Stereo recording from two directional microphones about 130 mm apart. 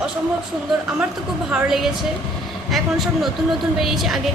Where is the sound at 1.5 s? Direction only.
5° right (ahead or behind).